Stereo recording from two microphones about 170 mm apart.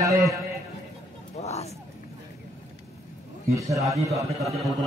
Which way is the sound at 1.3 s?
40° left (ahead or behind).